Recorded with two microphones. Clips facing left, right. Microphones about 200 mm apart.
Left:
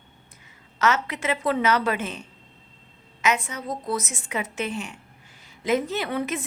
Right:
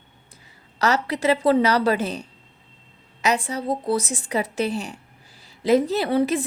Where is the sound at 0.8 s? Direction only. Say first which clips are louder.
Right 2 dB; 35° right (ahead or behind).